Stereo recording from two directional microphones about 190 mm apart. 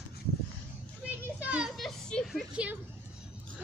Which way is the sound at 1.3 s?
5° right (ahead or behind).